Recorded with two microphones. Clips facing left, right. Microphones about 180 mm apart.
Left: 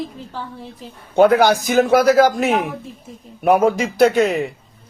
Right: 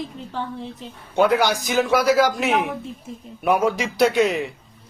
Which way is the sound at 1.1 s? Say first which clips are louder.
Left 6 dB; 50° left (ahead or behind).